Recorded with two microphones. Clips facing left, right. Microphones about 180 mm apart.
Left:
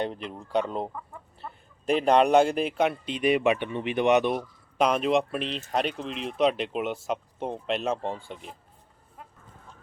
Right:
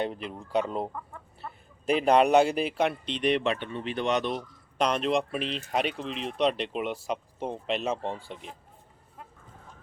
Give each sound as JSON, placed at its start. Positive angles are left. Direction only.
{"t": 0.0, "sound": "speech", "side_deg": -5}